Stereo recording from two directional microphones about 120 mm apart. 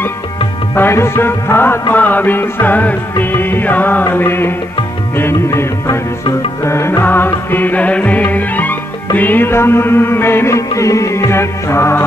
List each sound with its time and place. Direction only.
0.7 s music: 20° left (ahead or behind)